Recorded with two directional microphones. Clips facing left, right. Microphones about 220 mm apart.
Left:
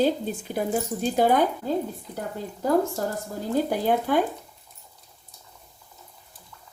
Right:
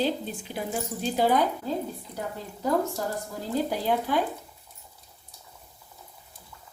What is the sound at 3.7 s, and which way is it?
Speech, 50° left (ahead or behind).